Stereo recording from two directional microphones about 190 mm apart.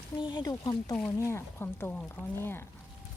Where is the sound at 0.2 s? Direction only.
20° left (ahead or behind).